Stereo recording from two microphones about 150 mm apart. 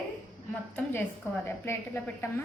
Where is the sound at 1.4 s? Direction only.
15° left (ahead or behind).